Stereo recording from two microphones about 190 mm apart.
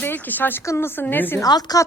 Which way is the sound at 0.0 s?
10° left (ahead or behind).